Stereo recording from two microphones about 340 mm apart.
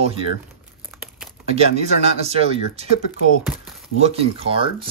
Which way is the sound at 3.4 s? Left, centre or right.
Centre.